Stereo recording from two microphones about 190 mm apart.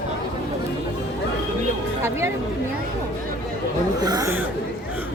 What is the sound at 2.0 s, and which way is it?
Speech, 15° right (ahead or behind).